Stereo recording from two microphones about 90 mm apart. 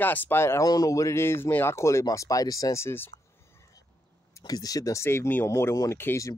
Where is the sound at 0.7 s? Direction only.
40° left (ahead or behind).